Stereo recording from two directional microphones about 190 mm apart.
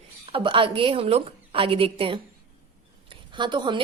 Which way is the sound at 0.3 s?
30° right (ahead or behind).